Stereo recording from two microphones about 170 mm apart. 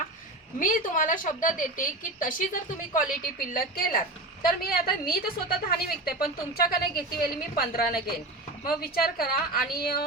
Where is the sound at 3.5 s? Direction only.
60° left (ahead or behind).